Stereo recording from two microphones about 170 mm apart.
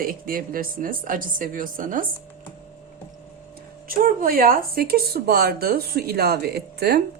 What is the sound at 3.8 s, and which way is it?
Speech, 60° right (ahead or behind).